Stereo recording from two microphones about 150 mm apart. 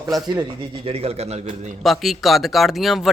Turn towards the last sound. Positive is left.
turn(degrees=0)  # may be behind; listen again after turning